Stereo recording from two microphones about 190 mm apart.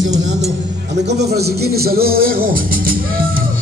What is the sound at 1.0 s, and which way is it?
Music, 60° right (ahead or behind).